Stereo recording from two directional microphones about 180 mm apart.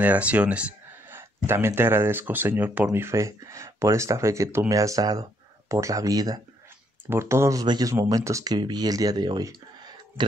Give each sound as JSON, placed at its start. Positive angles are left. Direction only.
{"t": 0.0, "sound": "speech", "side_deg": -10}